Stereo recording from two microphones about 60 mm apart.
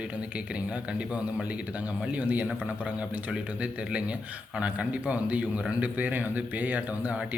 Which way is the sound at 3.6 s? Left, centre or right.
Right.